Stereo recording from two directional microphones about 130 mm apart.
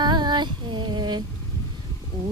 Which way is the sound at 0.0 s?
35° right (ahead or behind).